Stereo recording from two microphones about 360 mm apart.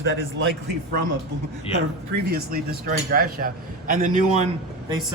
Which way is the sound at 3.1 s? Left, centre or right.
Right.